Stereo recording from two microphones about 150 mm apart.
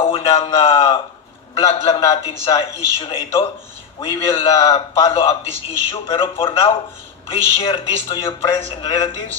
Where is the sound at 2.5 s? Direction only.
35° left (ahead or behind).